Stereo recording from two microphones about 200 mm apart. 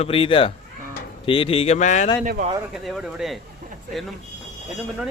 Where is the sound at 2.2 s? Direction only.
40° right (ahead or behind).